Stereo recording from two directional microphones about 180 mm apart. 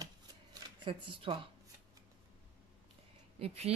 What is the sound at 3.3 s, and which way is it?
Speech, 35° right (ahead or behind).